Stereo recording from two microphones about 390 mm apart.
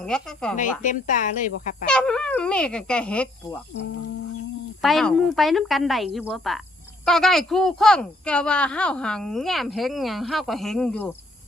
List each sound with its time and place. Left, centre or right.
0.0 s a woman's voice: centre
0.5 s speech: centre
1.9 s a woman's voice: centre
4.8 s a woman's voice: centre